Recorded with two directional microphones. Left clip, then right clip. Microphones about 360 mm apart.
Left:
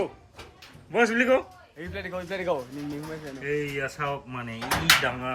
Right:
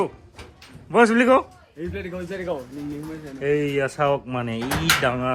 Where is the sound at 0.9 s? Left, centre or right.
Centre.